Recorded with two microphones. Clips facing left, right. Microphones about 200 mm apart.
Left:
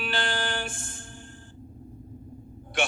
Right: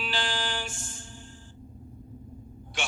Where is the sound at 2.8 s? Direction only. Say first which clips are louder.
Left 7 dB; 55° left (ahead or behind).